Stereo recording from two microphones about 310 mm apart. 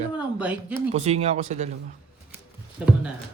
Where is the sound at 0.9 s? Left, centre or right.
Right.